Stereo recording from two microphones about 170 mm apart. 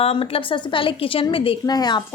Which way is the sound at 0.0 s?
35° left (ahead or behind).